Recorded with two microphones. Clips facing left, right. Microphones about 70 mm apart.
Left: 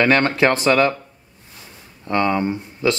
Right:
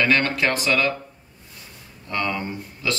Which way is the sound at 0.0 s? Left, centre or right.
Left.